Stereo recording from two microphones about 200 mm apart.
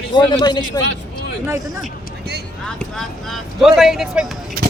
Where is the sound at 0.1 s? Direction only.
20° left (ahead or behind).